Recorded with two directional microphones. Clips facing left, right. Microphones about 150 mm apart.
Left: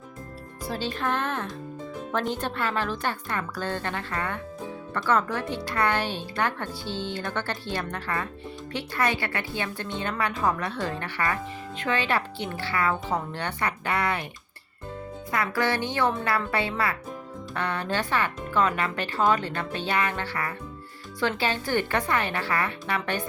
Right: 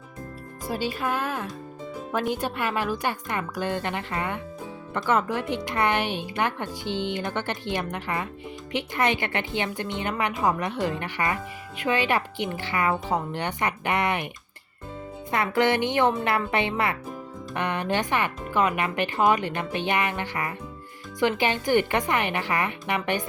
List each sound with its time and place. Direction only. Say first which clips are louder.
0.7 s speech: right 1 dB; 10° right (ahead or behind)
15.3 s speech: right 4 dB; 20° right (ahead or behind)